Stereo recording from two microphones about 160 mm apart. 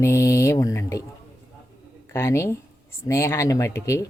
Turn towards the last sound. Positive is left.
turn(degrees=20)  # may be behind; listen again after turning